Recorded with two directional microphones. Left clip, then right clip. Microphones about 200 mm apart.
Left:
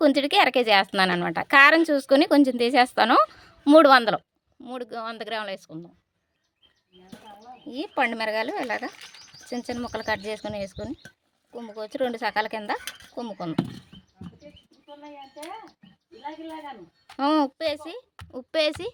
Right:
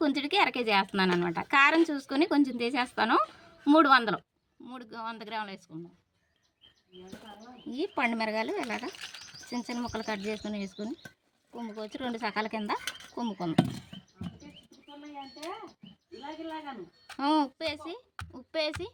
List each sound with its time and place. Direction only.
0.0 s a woman's voice: 60° left (ahead or behind)
7.7 s a woman's voice: 60° left (ahead or behind)
17.2 s a woman's voice: 55° left (ahead or behind)